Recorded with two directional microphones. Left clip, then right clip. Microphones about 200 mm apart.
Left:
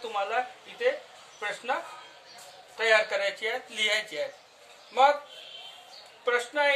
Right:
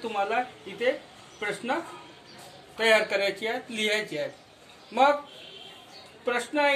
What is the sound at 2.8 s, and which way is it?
Speech, centre (ahead or behind).